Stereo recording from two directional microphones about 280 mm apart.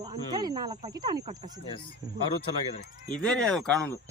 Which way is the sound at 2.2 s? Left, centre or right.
Centre.